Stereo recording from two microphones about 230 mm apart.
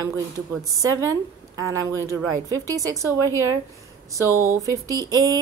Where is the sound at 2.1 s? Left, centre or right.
Centre.